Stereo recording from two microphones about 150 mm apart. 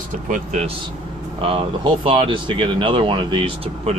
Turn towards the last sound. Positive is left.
turn(degrees=-35)  # may be behind; listen again after turning